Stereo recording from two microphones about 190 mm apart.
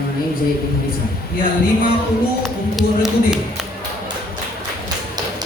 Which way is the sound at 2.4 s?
Centre (ahead or behind).